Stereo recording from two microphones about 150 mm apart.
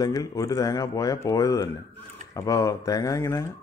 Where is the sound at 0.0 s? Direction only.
25° left (ahead or behind).